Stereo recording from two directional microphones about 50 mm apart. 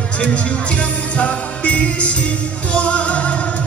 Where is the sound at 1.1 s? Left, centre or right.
Left.